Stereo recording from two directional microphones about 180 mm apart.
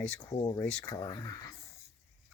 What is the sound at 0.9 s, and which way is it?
Speech, 20° left (ahead or behind).